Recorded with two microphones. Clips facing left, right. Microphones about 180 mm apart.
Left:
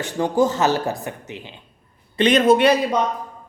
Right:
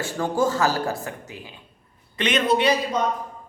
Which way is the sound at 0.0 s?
20° left (ahead or behind).